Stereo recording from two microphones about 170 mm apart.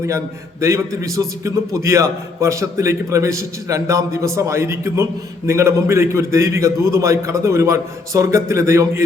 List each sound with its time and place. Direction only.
0.6 s a man's voice: 15° right (ahead or behind)